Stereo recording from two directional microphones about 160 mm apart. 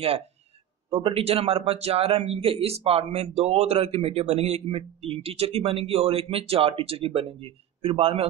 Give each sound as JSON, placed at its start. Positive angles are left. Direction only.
{"t": 0.8, "sound": "speech", "side_deg": -35}